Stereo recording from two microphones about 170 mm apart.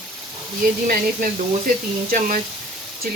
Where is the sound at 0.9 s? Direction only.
55° right (ahead or behind).